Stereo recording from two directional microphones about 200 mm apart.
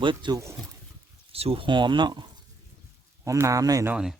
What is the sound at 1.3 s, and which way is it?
Speech, 30° right (ahead or behind).